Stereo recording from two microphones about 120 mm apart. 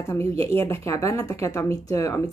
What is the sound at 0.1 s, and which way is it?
A woman's voice, 20° left (ahead or behind).